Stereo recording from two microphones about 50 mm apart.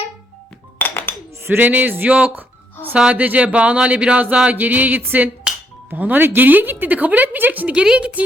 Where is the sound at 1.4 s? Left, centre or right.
Right.